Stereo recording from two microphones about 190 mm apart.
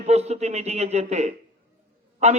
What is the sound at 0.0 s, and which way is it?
A man's voice, 35° right (ahead or behind).